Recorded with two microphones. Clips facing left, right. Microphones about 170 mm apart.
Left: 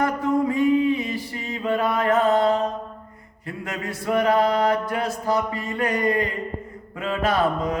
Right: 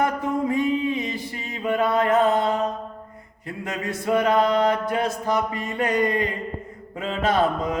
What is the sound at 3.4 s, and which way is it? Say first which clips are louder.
Speech: right 1 dB; 20° right (ahead or behind).